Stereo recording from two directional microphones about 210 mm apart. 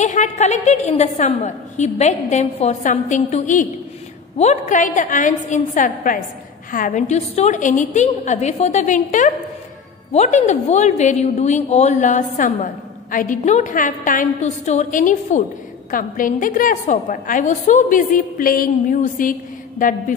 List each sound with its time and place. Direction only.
0.0 s a woman's voice: 35° left (ahead or behind)